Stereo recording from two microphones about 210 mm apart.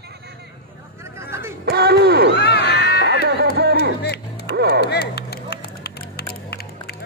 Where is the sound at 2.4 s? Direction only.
50° left (ahead or behind).